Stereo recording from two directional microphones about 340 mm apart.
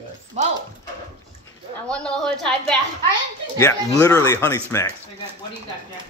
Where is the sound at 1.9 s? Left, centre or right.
Centre.